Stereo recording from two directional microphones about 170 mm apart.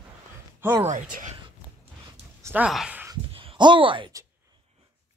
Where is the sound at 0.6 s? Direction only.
15° right (ahead or behind).